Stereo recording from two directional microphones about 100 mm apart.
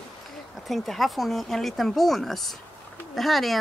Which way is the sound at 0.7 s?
Centre (ahead or behind).